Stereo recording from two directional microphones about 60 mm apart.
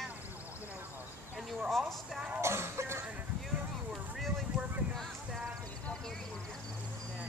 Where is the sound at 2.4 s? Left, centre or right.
Right.